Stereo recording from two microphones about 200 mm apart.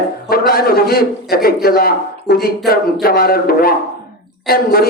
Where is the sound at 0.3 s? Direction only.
50° left (ahead or behind).